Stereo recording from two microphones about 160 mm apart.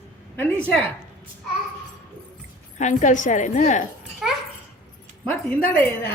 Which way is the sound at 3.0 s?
50° left (ahead or behind).